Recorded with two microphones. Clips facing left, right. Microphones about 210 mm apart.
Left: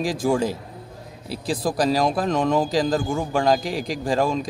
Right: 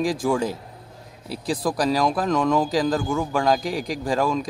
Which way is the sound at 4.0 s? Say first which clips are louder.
Left 1 dB; 30° left (ahead or behind).